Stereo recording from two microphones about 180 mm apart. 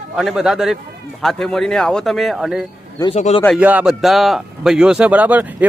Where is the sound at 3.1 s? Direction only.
35° left (ahead or behind).